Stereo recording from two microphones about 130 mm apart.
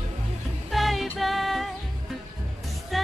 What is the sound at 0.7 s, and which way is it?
Music, centre (ahead or behind).